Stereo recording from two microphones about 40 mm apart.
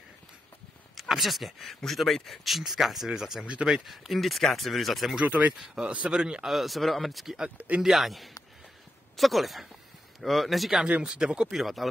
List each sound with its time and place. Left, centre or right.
0.9 s speech: centre
3.4 s speech: right
3.7 s speech: centre
5.2 s speech: right
6.0 s speech: right
6.4 s speech: centre
7.5 s speech: right
7.8 s speech: centre
11.1 s speech: right
11.5 s speech: centre